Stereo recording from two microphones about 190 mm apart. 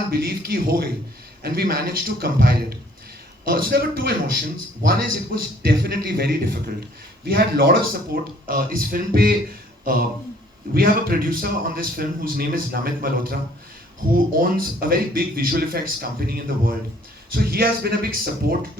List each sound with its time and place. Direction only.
0.1 s a man's voice: 55° right (ahead or behind)
14.3 s a man's voice: 50° right (ahead or behind)